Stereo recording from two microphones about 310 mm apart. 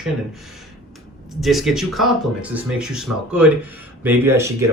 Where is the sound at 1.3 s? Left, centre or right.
Centre.